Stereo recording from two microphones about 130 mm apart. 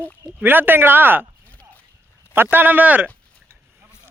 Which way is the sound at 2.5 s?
15° right (ahead or behind).